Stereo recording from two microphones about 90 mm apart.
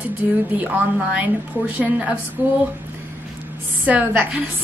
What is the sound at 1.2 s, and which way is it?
A woman's voice, 15° right (ahead or behind).